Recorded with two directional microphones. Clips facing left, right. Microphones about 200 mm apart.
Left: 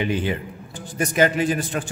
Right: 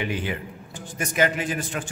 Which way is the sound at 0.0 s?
30° left (ahead or behind).